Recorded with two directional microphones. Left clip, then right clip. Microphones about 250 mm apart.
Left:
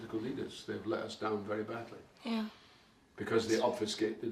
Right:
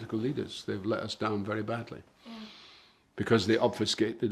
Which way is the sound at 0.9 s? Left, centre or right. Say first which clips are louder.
Right 4 dB; right.